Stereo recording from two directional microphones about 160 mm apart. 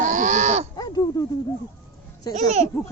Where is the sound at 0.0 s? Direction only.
55° right (ahead or behind).